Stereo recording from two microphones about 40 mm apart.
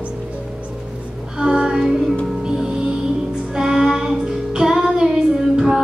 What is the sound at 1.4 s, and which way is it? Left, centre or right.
Music, centre.